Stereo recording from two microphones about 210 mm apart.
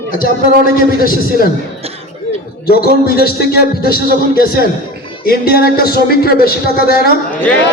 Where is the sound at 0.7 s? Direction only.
45° left (ahead or behind).